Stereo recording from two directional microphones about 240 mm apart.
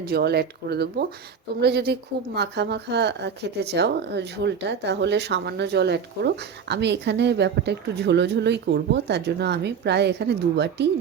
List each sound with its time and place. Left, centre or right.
0.0 s a woman's voice: right